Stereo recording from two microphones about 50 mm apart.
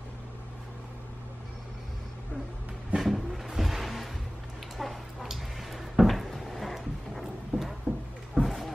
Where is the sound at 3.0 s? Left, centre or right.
Centre.